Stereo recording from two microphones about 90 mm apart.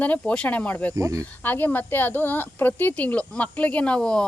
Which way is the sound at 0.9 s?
40° right (ahead or behind).